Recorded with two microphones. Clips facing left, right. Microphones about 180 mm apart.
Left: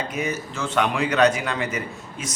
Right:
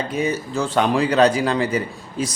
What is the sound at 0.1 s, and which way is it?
A man's voice, 30° right (ahead or behind).